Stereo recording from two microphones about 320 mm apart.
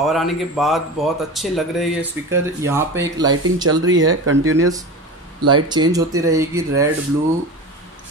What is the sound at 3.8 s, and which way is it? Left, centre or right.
Speech, right.